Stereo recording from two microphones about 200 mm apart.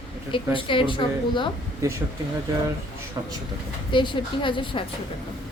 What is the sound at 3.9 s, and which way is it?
Speech, 25° left (ahead or behind).